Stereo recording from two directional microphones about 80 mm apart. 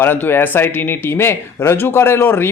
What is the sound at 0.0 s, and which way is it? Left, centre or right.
Speech, left.